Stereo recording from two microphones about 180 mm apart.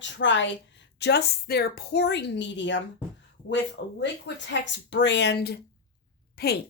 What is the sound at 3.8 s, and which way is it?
A woman's voice, 70° left (ahead or behind).